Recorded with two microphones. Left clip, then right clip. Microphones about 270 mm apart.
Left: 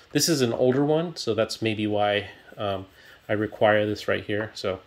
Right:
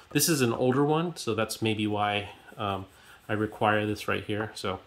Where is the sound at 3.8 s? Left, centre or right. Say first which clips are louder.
Left 4 dB; centre.